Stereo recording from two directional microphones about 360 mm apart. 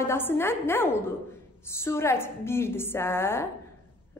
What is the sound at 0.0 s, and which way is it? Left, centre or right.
A woman's voice, centre.